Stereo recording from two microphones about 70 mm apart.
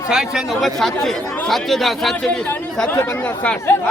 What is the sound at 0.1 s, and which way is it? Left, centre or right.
Speech, centre.